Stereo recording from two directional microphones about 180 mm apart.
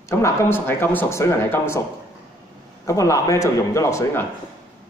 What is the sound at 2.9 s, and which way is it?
Speech, 15° left (ahead or behind).